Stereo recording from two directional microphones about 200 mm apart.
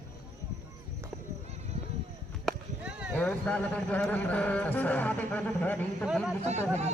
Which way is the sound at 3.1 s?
5° left (ahead or behind).